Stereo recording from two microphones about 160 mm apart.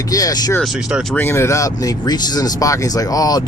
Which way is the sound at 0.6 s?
5° right (ahead or behind).